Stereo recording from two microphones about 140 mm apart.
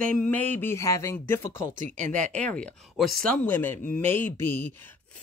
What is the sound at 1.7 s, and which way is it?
Speech, 65° right (ahead or behind).